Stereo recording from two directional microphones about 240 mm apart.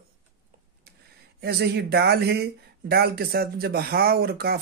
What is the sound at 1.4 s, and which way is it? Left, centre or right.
Speech, right.